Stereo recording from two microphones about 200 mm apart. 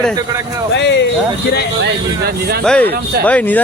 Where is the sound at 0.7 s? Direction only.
60° left (ahead or behind).